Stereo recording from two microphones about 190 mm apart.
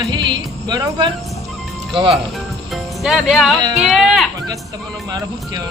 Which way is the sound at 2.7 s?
Centre (ahead or behind).